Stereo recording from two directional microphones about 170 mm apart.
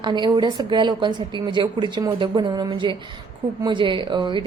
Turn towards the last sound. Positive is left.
turn(degrees=-25)  # may be behind; listen again after turning